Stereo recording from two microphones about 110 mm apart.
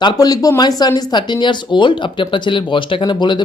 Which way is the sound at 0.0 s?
35° left (ahead or behind).